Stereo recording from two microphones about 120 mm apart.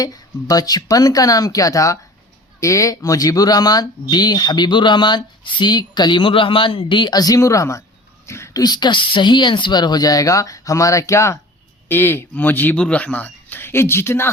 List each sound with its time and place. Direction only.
0.0 s speech: 30° left (ahead or behind)